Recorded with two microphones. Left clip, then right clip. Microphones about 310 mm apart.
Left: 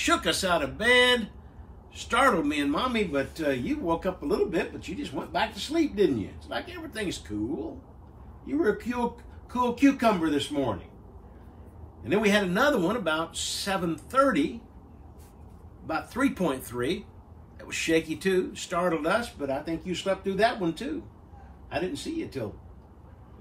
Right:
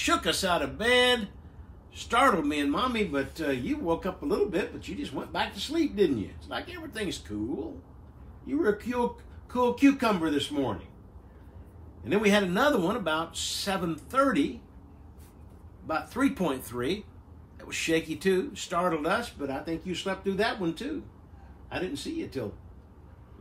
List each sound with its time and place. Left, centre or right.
0.0 s a man's voice: centre
12.0 s a man's voice: centre
15.9 s a man's voice: centre